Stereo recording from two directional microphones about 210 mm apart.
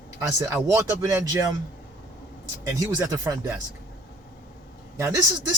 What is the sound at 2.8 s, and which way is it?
Speech, 15° right (ahead or behind).